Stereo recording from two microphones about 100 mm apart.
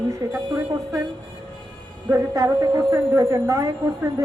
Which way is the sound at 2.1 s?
25° right (ahead or behind).